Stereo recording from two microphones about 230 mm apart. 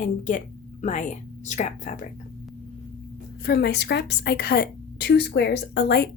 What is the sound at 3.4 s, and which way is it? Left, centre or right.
A woman's voice, left.